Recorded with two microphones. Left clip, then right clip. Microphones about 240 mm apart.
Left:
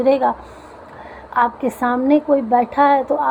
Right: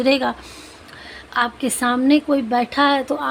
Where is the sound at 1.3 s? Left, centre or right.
Right.